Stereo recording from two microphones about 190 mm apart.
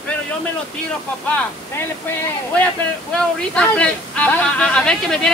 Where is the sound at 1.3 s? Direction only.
10° left (ahead or behind).